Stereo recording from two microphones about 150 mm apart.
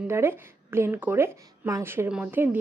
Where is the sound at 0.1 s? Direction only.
15° right (ahead or behind).